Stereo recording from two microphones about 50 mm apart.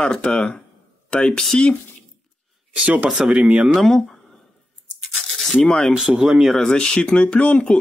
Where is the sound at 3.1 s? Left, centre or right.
Centre.